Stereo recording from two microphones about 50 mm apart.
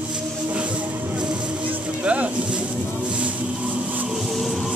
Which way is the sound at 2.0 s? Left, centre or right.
Right.